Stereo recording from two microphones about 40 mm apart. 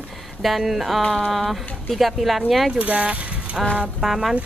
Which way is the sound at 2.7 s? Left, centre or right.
Right.